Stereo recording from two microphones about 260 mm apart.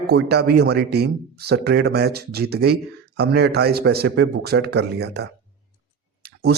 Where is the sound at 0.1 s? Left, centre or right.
Right.